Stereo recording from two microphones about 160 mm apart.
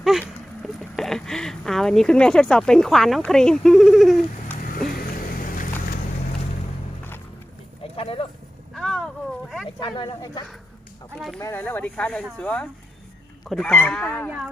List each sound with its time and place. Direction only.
0.0 s speech: centre (ahead or behind)
4.9 s boat: 65° left (ahead or behind)
7.9 s a sound: 35° left (ahead or behind)
8.7 s a sound: centre (ahead or behind)
9.8 s speech: 30° left (ahead or behind)
11.3 s speech: 15° left (ahead or behind)
14.3 s speech: 5° right (ahead or behind)